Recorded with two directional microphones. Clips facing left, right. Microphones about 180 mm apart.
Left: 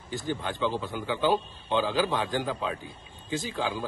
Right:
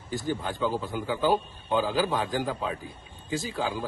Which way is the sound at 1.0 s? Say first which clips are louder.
Even; 40° right (ahead or behind).